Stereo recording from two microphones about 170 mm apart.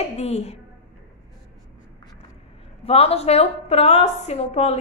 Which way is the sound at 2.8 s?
35° left (ahead or behind).